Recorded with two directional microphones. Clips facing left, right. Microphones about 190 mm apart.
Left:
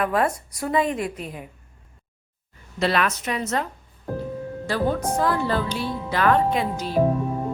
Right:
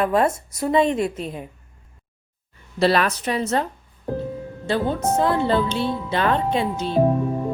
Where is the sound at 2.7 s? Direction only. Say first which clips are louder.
Right 4 dB; 35° right (ahead or behind).